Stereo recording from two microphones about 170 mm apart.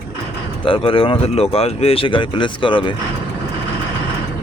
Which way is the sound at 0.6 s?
30° left (ahead or behind).